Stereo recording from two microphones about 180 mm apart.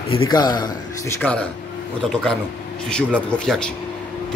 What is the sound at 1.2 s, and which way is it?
Speech, 5° left (ahead or behind).